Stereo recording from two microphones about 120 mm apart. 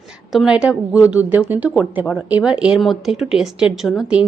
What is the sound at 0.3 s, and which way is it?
A woman's voice, 5° right (ahead or behind).